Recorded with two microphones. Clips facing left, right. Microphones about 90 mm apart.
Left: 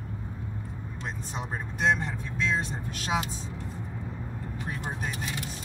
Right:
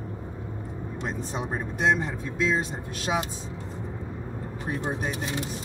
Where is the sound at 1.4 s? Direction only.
10° right (ahead or behind).